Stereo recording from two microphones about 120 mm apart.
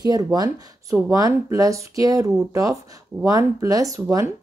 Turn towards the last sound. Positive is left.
turn(degrees=-30)  # may be behind; listen again after turning